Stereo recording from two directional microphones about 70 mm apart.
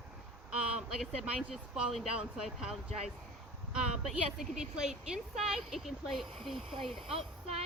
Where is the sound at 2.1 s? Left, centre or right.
Centre.